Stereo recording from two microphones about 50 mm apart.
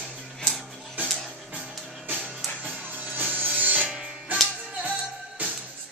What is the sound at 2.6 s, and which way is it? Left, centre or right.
Music, right.